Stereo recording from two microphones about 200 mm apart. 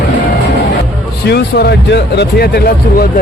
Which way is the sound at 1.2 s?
55° left (ahead or behind).